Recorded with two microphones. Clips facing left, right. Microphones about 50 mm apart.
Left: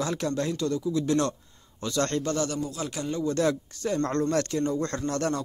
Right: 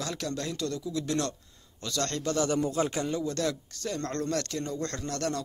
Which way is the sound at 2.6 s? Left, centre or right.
Right.